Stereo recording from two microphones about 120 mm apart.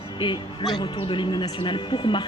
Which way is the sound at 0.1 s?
40° left (ahead or behind).